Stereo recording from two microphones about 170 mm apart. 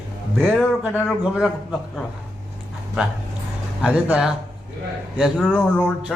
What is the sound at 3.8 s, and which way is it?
Speech, 5° right (ahead or behind).